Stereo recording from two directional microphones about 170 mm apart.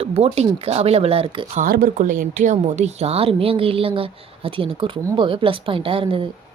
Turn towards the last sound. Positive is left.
turn(degrees=-30)  # may be behind; listen again after turning